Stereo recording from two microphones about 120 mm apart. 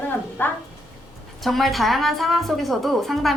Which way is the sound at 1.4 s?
Centre (ahead or behind).